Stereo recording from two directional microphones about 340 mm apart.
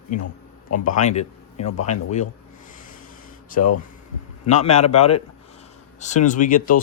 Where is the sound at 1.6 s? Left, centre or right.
Left.